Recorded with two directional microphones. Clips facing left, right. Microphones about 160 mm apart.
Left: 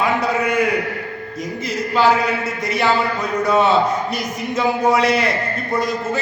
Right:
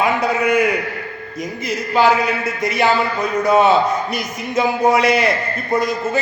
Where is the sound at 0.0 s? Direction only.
15° right (ahead or behind).